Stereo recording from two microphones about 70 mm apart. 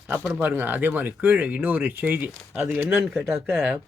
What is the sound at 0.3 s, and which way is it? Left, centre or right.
Speech, right.